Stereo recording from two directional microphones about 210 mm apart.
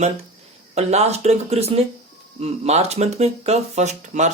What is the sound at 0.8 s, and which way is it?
Speech, 30° right (ahead or behind).